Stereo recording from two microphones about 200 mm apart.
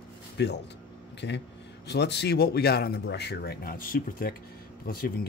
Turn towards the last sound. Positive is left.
turn(degrees=50)  # may be behind; listen again after turning